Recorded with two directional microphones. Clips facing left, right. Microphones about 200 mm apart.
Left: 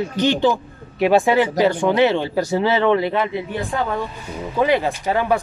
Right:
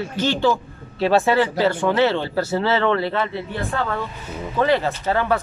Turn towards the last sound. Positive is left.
turn(degrees=15)  # may be behind; listen again after turning